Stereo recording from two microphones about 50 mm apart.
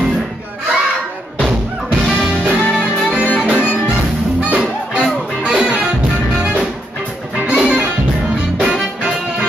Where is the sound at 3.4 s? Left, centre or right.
Centre.